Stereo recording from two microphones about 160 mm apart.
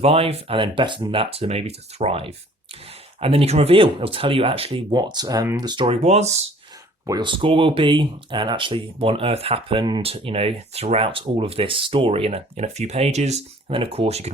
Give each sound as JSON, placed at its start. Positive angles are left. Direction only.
{"t": 0.0, "sound": "speech", "side_deg": -40}
{"t": 5.8, "sound": "speech", "side_deg": -40}
{"t": 7.1, "sound": "speech", "side_deg": -30}